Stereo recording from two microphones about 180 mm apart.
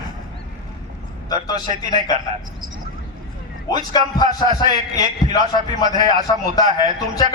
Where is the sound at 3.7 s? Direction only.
20° left (ahead or behind).